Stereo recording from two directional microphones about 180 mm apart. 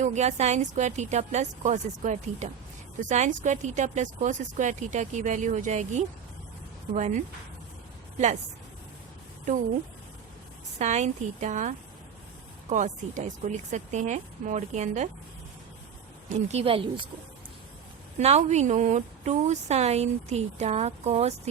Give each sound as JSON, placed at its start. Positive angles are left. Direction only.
{"t": 0.0, "sound": "a woman's voice", "side_deg": -40}
{"t": 10.8, "sound": "a woman's voice", "side_deg": -40}
{"t": 16.3, "sound": "a woman's voice", "side_deg": -35}
{"t": 18.2, "sound": "a woman's voice", "side_deg": -35}